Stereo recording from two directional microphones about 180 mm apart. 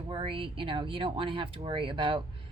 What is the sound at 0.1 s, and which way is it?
Speech, 30° right (ahead or behind).